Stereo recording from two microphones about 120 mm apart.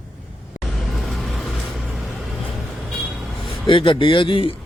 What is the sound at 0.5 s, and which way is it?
Vehicle, 90° left.